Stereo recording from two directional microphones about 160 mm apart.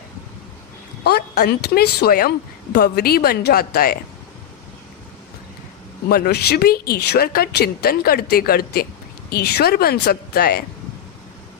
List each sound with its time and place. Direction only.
1.0 s a woman's voice: 85° left; by 3.9 s 70° left (ahead or behind)
6.1 s speech: 70° left (ahead or behind)
9.3 s speech: 80° left